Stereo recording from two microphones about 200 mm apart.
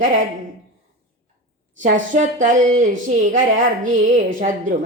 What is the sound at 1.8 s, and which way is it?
Speech, 40° right (ahead or behind).